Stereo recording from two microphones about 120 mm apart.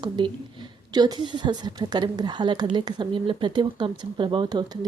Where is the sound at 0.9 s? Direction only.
35° right (ahead or behind).